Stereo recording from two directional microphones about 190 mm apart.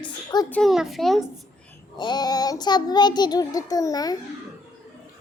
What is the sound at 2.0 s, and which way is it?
Child singing, 20° left (ahead or behind).